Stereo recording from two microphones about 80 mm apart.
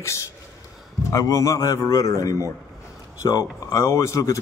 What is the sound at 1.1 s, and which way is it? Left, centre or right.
A man's voice, left.